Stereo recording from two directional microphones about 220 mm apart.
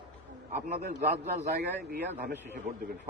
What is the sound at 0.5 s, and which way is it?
A man's voice, 40° right (ahead or behind).